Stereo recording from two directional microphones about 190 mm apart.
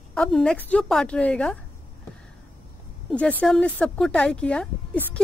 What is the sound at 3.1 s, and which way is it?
Speech, 5° left (ahead or behind).